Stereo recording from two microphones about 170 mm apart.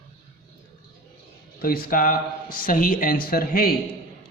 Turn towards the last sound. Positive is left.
turn(degrees=60)  # may be behind; listen again after turning